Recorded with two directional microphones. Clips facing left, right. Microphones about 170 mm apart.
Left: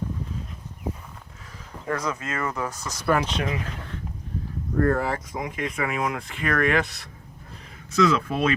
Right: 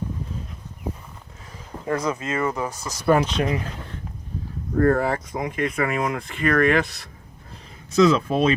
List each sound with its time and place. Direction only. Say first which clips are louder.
1.9 s speech: right 4 dB; 25° right (ahead or behind)
4.9 s speech: right 4 dB; 50° right (ahead or behind)
7.9 s speech: right 4 dB; 25° right (ahead or behind)